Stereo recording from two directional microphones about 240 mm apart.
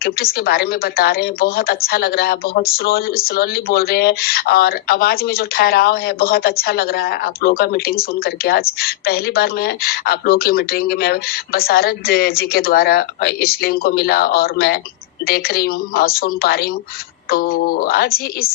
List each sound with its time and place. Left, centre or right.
0.0 s a woman's voice: left